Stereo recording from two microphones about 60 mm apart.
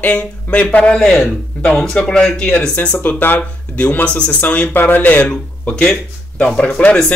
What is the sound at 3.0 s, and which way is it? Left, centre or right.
Speech, left.